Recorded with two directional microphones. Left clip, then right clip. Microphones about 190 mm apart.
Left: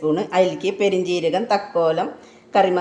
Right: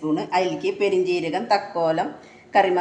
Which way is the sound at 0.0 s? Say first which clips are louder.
Left 4 dB; 40° left (ahead or behind).